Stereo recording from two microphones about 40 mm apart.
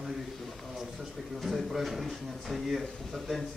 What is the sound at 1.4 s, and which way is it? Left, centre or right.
Speech, centre.